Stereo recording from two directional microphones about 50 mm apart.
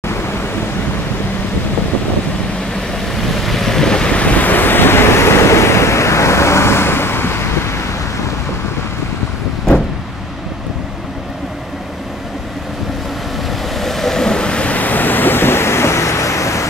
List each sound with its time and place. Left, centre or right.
0.1 s waves: left
2.7 s vehicle: centre; by 7.8 s left
13.7 s vehicle: centre; by 16.6 s left